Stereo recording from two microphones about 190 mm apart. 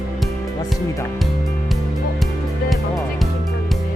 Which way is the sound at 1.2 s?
Centre (ahead or behind).